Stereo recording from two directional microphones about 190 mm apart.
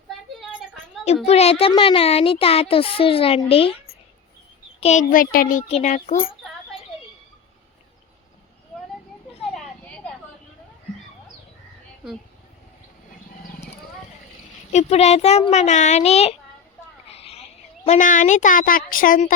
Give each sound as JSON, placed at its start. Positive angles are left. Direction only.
{"t": 1.0, "sound": "speech", "side_deg": 35}
{"t": 4.8, "sound": "a child's voice", "side_deg": 40}
{"t": 9.6, "sound": "a sound", "side_deg": 5}
{"t": 14.7, "sound": "a child's voice", "side_deg": 35}
{"t": 17.1, "sound": "a sound", "side_deg": 30}
{"t": 17.8, "sound": "a woman's voice", "side_deg": 40}